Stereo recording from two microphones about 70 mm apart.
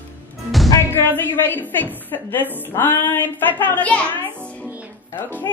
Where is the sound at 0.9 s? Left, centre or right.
Left.